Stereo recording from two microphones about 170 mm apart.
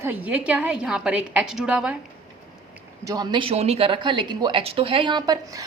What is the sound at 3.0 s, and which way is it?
A woman's voice, 25° right (ahead or behind).